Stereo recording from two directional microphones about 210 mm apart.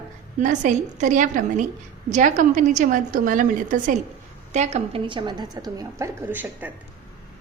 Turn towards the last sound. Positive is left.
turn(degrees=-10)  # may be behind; listen again after turning